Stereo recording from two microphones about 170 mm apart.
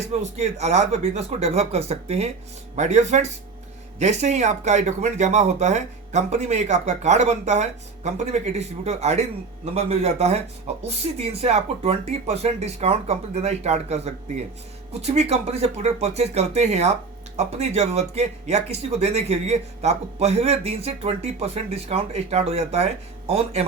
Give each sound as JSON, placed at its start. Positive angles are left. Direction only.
{"t": 0.0, "sound": "speech", "side_deg": -40}